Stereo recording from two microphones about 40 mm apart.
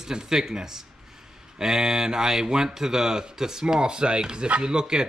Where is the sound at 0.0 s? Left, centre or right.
Centre.